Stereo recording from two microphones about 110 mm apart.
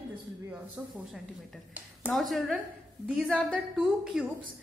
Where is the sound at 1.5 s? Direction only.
5° left (ahead or behind).